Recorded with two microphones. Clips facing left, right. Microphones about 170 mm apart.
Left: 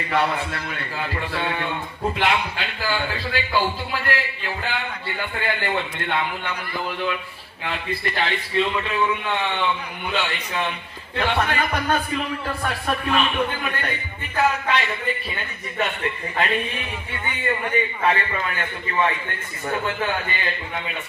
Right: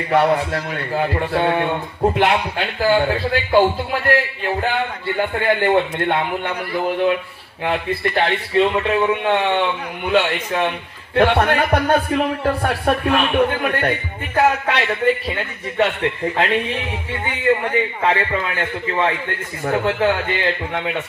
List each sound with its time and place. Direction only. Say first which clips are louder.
0.1 s a man's voice: right 7 dB; 45° right (ahead or behind); by 16.8 s 90° right
17.3 s a man's voice: right 7 dB; 80° right
19.7 s a man's voice: right 7 dB; 70° right (ahead or behind)